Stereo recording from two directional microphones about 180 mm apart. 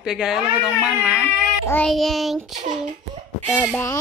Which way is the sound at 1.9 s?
Centre (ahead or behind).